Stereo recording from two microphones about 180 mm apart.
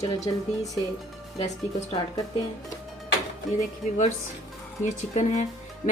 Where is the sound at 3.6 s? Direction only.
40° left (ahead or behind).